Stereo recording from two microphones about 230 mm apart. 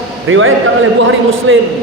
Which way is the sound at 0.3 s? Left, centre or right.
Right.